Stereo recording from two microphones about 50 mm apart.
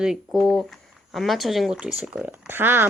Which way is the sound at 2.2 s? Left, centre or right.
Right.